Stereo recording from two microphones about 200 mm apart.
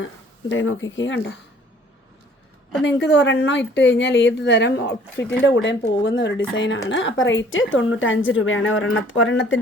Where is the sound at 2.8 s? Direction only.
60° left (ahead or behind).